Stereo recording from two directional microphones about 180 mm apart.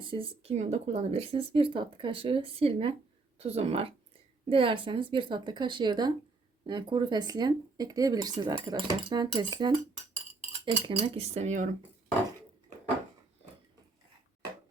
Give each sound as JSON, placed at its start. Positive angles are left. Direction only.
{"t": 0.0, "sound": "speech", "side_deg": -30}